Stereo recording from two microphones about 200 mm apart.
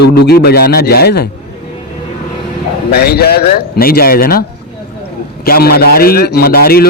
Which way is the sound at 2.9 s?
50° left (ahead or behind).